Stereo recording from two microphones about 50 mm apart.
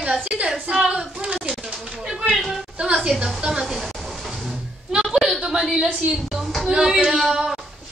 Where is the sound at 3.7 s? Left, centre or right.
Centre.